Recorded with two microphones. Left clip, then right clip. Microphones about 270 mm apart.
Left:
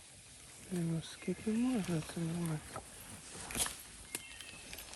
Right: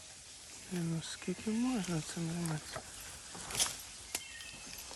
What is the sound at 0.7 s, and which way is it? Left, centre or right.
Speech, centre.